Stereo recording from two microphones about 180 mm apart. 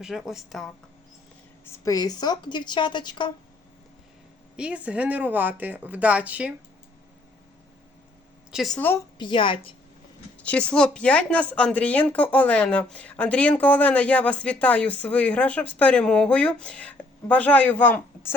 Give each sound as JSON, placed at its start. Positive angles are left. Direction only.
{"t": 0.0, "sound": "speech", "side_deg": -5}
{"t": 1.6, "sound": "a woman's voice", "side_deg": 20}
{"t": 4.5, "sound": "speech", "side_deg": -5}
{"t": 8.5, "sound": "speech", "side_deg": 0}
{"t": 9.1, "sound": "a woman's voice", "side_deg": 25}
{"t": 10.3, "sound": "speech", "side_deg": 5}